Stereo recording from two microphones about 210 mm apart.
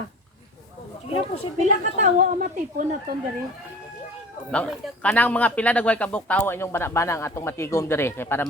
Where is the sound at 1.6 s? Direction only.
35° right (ahead or behind).